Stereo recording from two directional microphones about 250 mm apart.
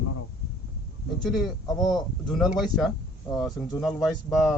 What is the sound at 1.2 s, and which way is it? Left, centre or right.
Speech, centre.